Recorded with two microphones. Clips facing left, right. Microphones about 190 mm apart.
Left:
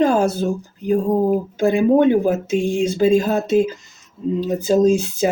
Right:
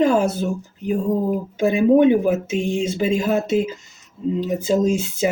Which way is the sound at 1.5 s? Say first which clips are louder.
Right 1 dB; 20° right (ahead or behind).